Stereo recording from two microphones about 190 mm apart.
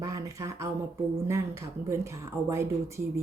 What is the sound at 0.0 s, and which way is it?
Speech, 20° right (ahead or behind).